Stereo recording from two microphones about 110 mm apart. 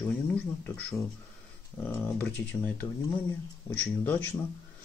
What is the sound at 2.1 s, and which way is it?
Speech, 15° left (ahead or behind).